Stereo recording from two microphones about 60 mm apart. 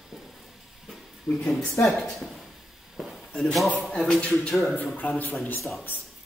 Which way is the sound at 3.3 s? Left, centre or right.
Centre.